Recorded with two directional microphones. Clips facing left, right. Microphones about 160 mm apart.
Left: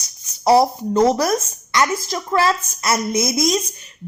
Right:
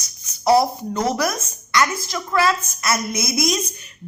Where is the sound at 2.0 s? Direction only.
35° left (ahead or behind).